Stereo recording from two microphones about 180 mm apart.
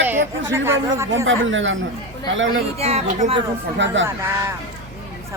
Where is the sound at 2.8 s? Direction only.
35° right (ahead or behind).